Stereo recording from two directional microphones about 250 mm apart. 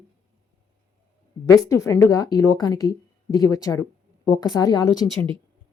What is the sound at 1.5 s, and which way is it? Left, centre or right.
A woman's voice, centre.